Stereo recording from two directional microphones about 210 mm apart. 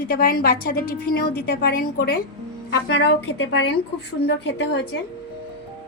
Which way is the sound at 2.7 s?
60° left (ahead or behind).